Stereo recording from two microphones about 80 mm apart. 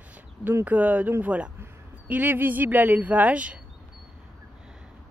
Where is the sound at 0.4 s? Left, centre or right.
Right.